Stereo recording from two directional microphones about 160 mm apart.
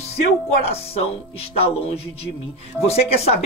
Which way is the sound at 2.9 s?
40° left (ahead or behind).